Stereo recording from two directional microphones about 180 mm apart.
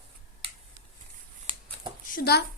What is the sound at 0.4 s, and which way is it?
Scissors, 30° right (ahead or behind).